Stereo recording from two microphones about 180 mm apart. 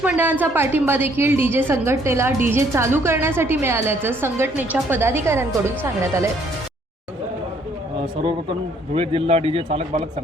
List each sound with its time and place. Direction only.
0.0 s a woman's voice: 10° right (ahead or behind)
9.0 s speech: 35° right (ahead or behind)